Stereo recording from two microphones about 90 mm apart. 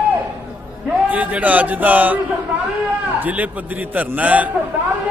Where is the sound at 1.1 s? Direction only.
20° right (ahead or behind).